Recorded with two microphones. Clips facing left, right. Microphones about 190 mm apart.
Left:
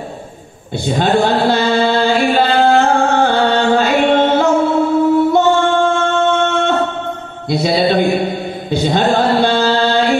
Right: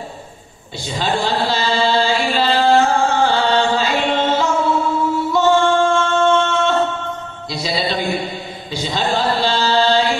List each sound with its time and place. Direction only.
0.8 s chant: 55° left (ahead or behind)
5.1 s singing: 55° left (ahead or behind)
7.4 s mantra: 55° left (ahead or behind)